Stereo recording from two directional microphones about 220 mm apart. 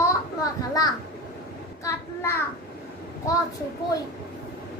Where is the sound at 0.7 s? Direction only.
15° left (ahead or behind).